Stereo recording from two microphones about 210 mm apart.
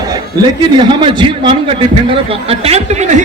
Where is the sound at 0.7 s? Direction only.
20° right (ahead or behind).